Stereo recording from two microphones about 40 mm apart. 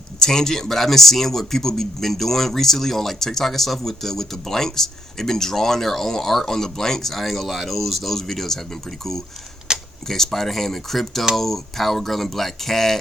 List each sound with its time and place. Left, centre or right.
0.2 s speech: centre
9.7 s a sound: centre
10.1 s speech: centre